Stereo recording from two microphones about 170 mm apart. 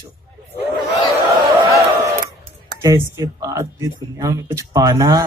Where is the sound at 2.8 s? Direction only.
20° right (ahead or behind).